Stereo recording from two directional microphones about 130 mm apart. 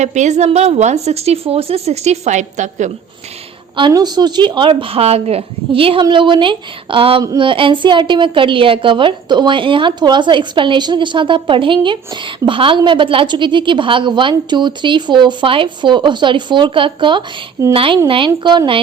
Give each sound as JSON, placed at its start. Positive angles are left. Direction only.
{"t": 0.0, "sound": "a woman's voice", "side_deg": -65}
{"t": 3.8, "sound": "a woman's voice", "side_deg": -35}